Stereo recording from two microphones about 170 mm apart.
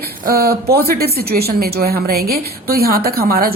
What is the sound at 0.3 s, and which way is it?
A woman's voice, 65° right (ahead or behind).